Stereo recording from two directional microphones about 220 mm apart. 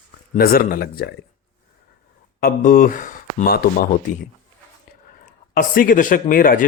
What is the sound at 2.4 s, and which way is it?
Speech, 40° left (ahead or behind).